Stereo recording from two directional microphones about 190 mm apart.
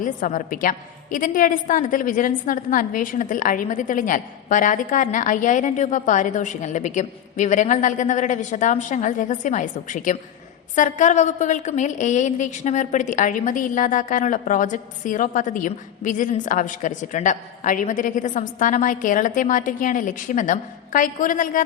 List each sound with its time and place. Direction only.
0.0 s a woman's voice: 45° left (ahead or behind)